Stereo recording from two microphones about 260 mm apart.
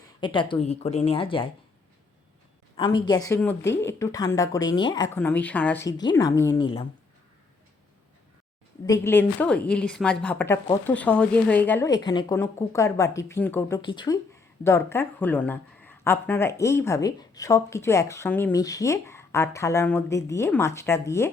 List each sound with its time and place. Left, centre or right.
0.0 s speech: centre
2.7 s a woman's voice: centre
8.9 s a woman's voice: centre